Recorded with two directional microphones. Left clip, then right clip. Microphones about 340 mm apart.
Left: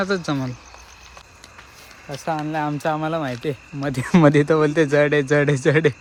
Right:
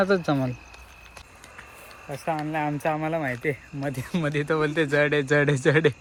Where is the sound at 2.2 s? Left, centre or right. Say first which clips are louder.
Left 3 dB; centre.